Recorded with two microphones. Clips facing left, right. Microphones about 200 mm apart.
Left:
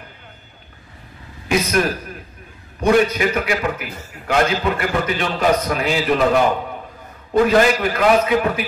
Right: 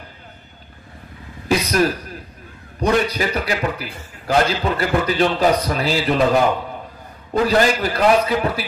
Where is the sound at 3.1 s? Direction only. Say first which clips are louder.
Left 2 dB; 35° right (ahead or behind).